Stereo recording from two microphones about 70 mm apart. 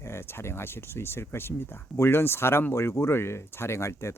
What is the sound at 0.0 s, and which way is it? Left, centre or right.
Speech, left.